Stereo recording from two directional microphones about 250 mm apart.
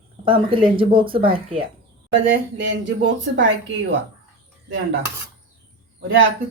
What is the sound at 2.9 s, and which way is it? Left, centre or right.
Speech, right.